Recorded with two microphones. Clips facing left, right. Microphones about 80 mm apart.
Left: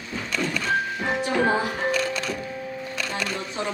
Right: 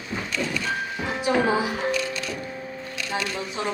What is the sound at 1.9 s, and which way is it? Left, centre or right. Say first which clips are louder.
Music: left 2 dB; left.